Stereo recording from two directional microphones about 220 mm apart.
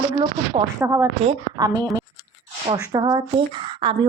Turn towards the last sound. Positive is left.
turn(degrees=-20)  # may be behind; listen again after turning